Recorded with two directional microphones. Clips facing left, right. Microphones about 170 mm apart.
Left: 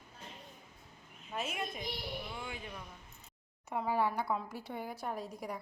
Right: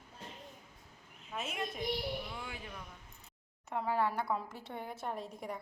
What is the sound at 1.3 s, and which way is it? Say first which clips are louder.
A woman's voice: left 1 dB; centre (ahead or behind).